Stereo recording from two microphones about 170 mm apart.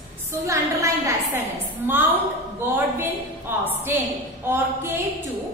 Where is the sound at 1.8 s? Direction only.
10° right (ahead or behind).